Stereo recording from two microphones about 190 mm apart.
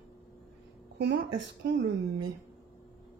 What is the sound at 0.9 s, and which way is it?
Speech, 65° right (ahead or behind).